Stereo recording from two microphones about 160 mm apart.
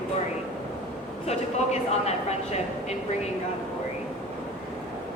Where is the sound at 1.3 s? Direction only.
45° left (ahead or behind).